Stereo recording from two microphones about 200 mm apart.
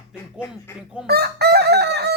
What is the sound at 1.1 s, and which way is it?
Chicken, 55° right (ahead or behind).